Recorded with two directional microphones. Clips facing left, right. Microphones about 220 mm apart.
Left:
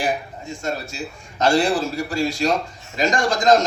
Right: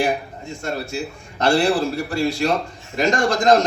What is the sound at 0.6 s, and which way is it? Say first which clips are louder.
A man's voice: right 2 dB; 60° right (ahead or behind).